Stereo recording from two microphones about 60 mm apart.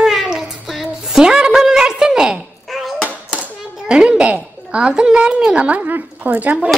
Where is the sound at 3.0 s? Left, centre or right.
Centre.